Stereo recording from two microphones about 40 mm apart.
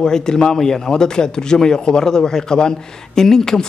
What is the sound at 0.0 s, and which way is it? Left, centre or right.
A man's voice, centre.